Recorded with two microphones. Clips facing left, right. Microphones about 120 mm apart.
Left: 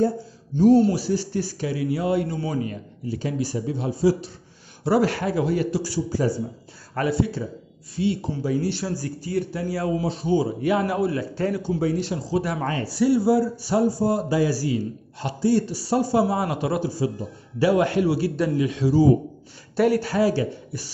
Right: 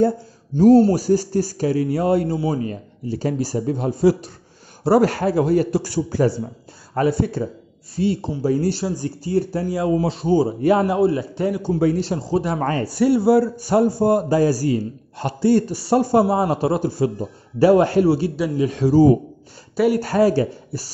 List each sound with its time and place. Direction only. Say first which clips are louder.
0.6 s a man's voice: right 4 dB; 40° right (ahead or behind)
4.8 s a man's voice: right 5 dB; 40° right (ahead or behind); by 6.4 s 65° right (ahead or behind)
7.1 s a man's voice: even; 45° right (ahead or behind)
8.8 s a man's voice: right 4 dB; 20° right (ahead or behind)
10.9 s speech: right 5 dB; 25° right (ahead or behind)
12.0 s a man's voice: right 3 dB; 40° right (ahead or behind)
16.3 s a man's voice: right 5 dB; 35° right (ahead or behind)
16.8 s a man's voice: right 5 dB; 55° right (ahead or behind); by 18.3 s 30° right (ahead or behind)
18.6 s a man's voice: right 6 dB; 45° right (ahead or behind)